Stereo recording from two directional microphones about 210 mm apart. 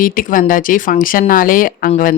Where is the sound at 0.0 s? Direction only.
40° left (ahead or behind).